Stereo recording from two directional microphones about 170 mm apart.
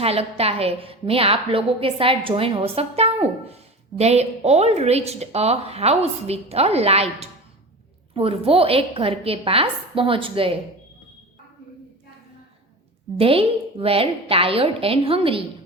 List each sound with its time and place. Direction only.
0.0 s a woman's voice: 35° right (ahead or behind)
13.1 s a woman's voice: 35° right (ahead or behind)